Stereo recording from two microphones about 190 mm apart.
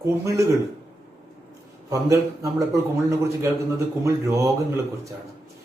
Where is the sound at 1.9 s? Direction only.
15° right (ahead or behind).